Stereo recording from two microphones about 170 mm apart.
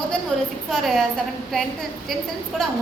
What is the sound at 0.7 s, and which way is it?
Speech, centre (ahead or behind).